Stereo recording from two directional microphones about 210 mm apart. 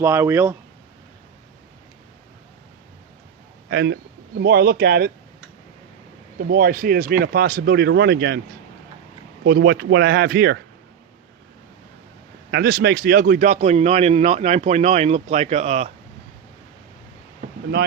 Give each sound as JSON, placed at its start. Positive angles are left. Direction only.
{"t": 0.0, "sound": "speech", "side_deg": -10}
{"t": 3.7, "sound": "a man's voice", "side_deg": -55}
{"t": 6.5, "sound": "speech", "side_deg": -45}
{"t": 9.4, "sound": "speech", "side_deg": -50}
{"t": 12.5, "sound": "a man's voice", "side_deg": -50}